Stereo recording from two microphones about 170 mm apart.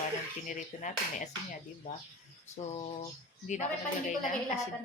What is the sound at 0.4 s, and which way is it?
Speech, 50° left (ahead or behind).